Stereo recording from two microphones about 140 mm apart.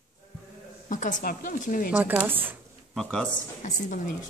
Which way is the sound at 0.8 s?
65° left (ahead or behind).